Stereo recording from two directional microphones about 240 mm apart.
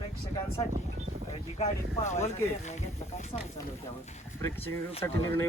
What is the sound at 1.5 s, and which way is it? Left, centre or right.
Speech, left.